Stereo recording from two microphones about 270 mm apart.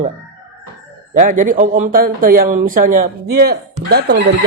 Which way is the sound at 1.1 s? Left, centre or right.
Right.